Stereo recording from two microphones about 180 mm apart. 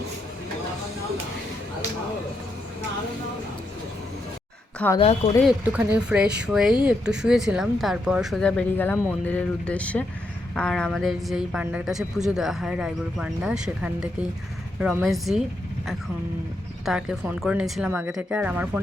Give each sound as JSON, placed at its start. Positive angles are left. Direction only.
{"t": 4.9, "sound": "a woman's voice", "side_deg": 35}
{"t": 5.5, "sound": "a woman's voice", "side_deg": -10}
{"t": 16.8, "sound": "speech", "side_deg": -5}